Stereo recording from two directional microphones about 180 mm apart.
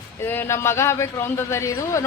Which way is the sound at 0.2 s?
15° left (ahead or behind).